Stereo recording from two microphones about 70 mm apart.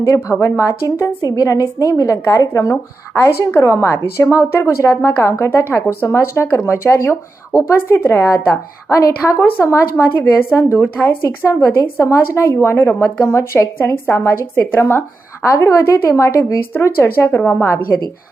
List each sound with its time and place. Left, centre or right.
0.0 s a woman's voice: left
11.0 s speech: left
11.4 s a woman's voice: left